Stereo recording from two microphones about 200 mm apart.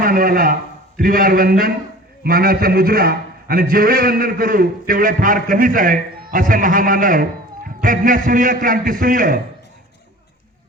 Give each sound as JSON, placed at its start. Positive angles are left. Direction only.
{"t": 0.0, "sound": "a man's voice", "side_deg": -45}